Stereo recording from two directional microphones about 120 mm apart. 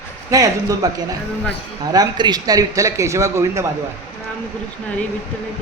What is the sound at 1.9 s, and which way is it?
A man's voice, 35° right (ahead or behind).